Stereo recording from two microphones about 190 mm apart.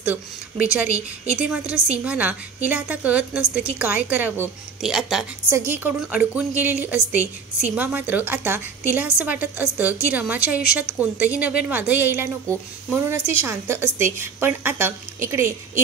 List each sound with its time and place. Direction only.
0.0 s a woman's voice: 10° right (ahead or behind)
0.9 s a woman's voice: 35° right (ahead or behind)
1.4 s a woman's voice: 5° right (ahead or behind)